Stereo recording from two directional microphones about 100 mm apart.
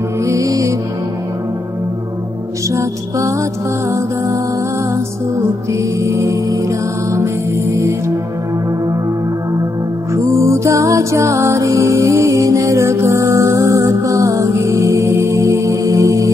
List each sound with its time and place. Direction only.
0.2 s music: 30° right (ahead or behind)
2.7 s music: 30° right (ahead or behind)
5.7 s music: 30° right (ahead or behind)
7.7 s music: 30° right (ahead or behind)
10.1 s music: 30° right (ahead or behind)